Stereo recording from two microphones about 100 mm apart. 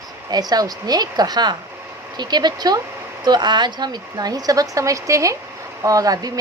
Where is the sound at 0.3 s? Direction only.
40° right (ahead or behind).